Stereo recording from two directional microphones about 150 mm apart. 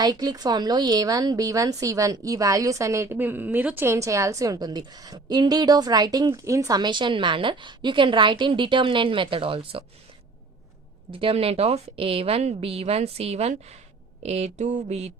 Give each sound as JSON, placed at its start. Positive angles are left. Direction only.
{"t": 0.0, "sound": "a woman's voice", "side_deg": -25}
{"t": 11.1, "sound": "a woman's voice", "side_deg": -40}
{"t": 14.2, "sound": "a sound", "side_deg": -45}